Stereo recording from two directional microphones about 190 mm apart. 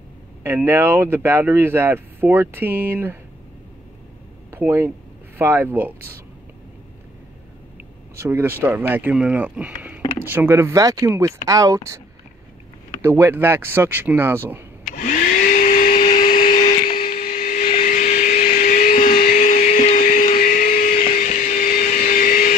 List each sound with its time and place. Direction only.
0.4 s speech: 10° right (ahead or behind)
4.5 s speech: 10° right (ahead or behind)
8.2 s speech: 10° right (ahead or behind)
13.0 s speech: 10° right (ahead or behind)
14.9 s vacuum cleaner: 40° left (ahead or behind)